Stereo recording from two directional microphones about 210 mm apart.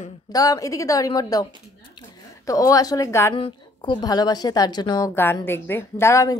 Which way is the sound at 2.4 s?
15° left (ahead or behind).